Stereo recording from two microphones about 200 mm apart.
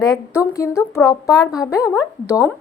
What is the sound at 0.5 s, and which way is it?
A woman's voice, 15° left (ahead or behind).